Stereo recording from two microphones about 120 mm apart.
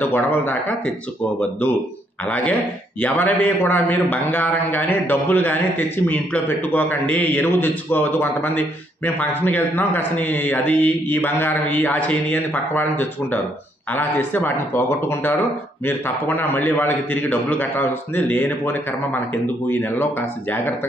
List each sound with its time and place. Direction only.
0.0 s a man's voice: 15° left (ahead or behind)
2.2 s a man's voice: 10° left (ahead or behind)